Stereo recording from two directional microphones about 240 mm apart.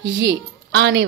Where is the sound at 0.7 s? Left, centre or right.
Right.